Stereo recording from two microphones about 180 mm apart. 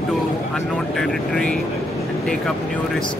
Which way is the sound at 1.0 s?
5° left (ahead or behind).